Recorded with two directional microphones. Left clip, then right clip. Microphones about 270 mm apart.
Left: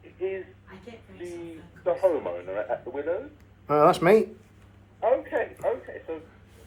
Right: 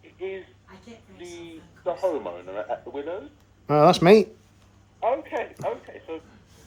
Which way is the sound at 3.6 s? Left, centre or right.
Right.